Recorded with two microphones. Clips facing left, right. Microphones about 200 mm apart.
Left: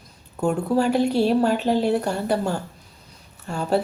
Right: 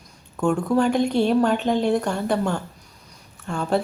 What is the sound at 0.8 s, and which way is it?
Speech, 5° left (ahead or behind).